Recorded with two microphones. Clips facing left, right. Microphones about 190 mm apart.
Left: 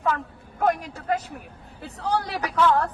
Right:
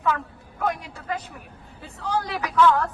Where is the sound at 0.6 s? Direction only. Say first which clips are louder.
Left 4 dB; 50° left (ahead or behind).